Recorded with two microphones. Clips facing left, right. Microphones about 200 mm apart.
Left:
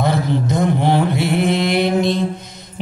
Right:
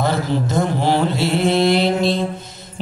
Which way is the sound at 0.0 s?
20° left (ahead or behind).